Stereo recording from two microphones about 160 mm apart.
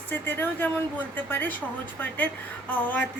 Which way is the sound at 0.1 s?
10° left (ahead or behind).